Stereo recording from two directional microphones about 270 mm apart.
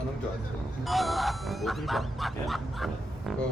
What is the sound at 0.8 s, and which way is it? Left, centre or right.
Bow-wow, centre.